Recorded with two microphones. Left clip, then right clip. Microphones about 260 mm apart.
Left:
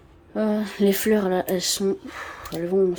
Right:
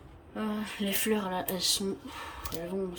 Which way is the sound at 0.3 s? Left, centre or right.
Left.